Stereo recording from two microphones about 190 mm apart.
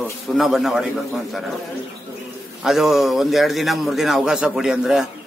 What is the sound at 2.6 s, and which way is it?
A man's voice, centre (ahead or behind).